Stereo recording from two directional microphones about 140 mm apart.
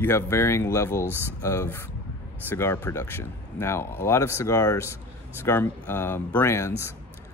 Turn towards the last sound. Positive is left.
turn(degrees=20)  # may be behind; listen again after turning